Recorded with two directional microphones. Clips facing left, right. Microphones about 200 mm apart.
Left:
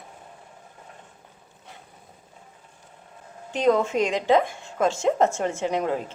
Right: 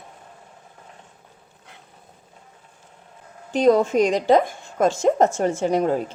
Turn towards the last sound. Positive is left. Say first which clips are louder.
# right 5 dB
turn(degrees=-40)  # may be behind; listen again after turning